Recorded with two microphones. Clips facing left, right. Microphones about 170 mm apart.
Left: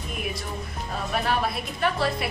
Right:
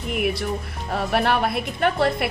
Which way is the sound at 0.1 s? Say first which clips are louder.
Right 9 dB; 70° right (ahead or behind).